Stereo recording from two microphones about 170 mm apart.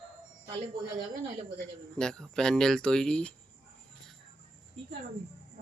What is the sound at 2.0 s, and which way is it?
Speech, 5° left (ahead or behind).